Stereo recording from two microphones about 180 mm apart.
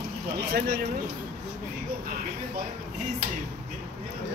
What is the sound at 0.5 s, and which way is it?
Speech, 55° right (ahead or behind).